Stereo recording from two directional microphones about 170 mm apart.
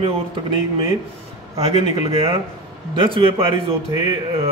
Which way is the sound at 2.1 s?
35° right (ahead or behind).